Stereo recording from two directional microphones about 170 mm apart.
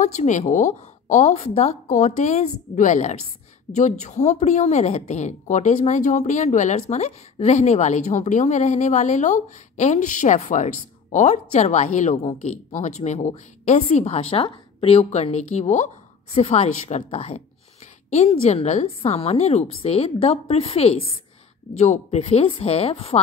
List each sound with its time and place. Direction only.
0.0 s a woman's voice: 45° left (ahead or behind)